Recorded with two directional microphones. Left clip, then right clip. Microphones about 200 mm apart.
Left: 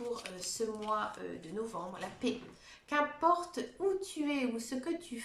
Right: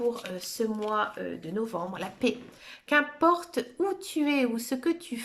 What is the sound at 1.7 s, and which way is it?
Speech, 45° right (ahead or behind).